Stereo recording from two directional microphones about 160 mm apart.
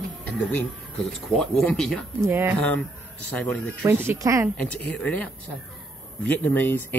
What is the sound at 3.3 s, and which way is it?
Speech, 10° left (ahead or behind).